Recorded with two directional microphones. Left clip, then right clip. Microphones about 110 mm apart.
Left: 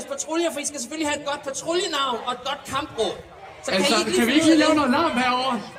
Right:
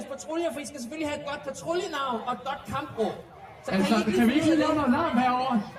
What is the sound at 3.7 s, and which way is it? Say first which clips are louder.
A man's voice: left 5 dB; 35° left (ahead or behind).